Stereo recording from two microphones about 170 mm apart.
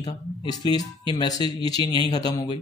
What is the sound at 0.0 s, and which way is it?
Speech, 25° left (ahead or behind).